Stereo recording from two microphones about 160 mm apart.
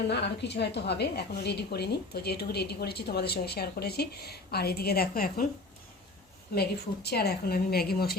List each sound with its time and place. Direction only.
0.1 s a woman's voice: 90° left; by 5.5 s 65° left (ahead or behind)
6.5 s speech: 85° left